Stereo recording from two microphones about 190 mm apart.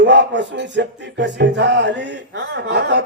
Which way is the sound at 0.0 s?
65° right (ahead or behind).